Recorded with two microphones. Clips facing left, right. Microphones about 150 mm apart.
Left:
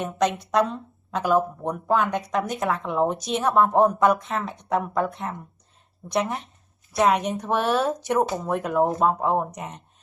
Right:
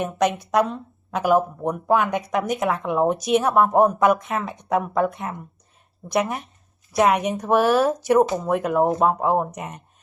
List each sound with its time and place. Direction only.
0.7 s speech: 10° right (ahead or behind)